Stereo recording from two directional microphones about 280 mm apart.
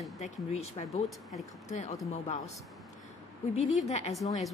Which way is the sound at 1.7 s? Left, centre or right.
Left.